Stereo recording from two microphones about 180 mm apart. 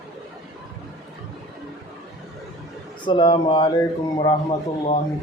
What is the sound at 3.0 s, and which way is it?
A man's voice, 25° left (ahead or behind).